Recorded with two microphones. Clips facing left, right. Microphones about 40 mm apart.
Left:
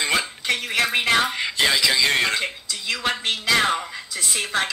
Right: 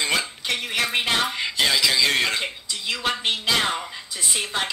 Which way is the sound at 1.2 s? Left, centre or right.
Centre.